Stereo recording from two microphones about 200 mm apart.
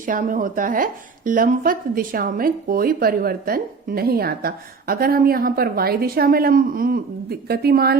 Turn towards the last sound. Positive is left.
turn(degrees=-50)  # may be behind; listen again after turning